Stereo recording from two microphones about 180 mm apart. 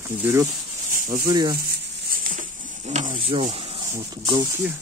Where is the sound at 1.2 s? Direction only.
20° right (ahead or behind).